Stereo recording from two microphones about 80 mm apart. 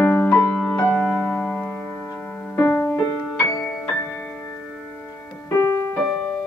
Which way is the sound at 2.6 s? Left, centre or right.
Left.